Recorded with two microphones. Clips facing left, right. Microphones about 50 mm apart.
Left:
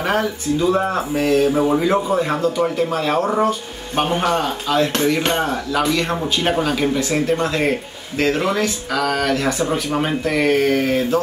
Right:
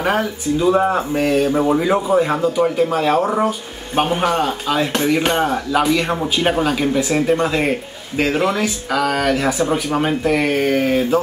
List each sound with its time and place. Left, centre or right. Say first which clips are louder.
0.0 s speech: right 1 dB; centre
1.7 s speech: right 1 dB; centre